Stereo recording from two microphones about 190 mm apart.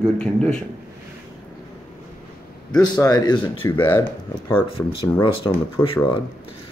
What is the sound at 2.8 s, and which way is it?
Speech, 20° left (ahead or behind).